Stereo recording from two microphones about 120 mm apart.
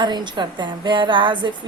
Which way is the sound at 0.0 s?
40° right (ahead or behind).